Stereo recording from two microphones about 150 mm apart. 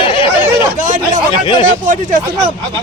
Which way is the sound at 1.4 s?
30° left (ahead or behind).